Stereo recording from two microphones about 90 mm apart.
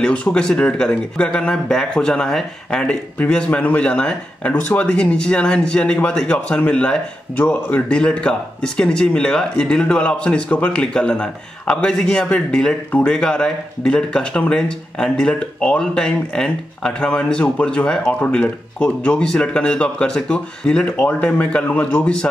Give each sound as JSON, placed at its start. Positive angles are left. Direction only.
{"t": 0.0, "sound": "speech", "side_deg": 10}